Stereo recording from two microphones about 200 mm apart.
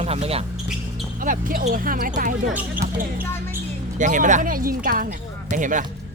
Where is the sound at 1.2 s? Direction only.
45° right (ahead or behind).